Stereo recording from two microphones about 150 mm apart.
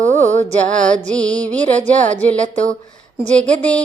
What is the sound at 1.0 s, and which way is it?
Speech, 10° left (ahead or behind).